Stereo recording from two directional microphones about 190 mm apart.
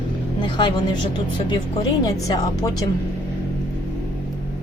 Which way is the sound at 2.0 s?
20° left (ahead or behind).